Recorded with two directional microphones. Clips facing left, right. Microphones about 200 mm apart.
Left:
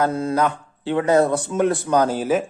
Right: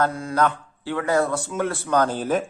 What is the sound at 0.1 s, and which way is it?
A man's voice, 25° left (ahead or behind).